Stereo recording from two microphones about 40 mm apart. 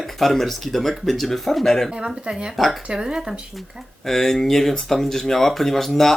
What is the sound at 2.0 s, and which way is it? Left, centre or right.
Speech, right.